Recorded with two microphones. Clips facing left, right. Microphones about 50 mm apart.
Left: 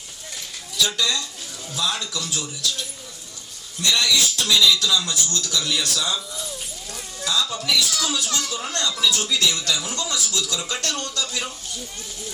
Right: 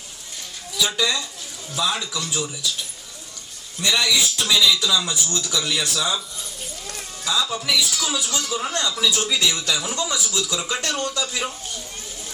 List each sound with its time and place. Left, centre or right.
0.8 s speech: centre
3.8 s speech: centre
7.3 s speech: centre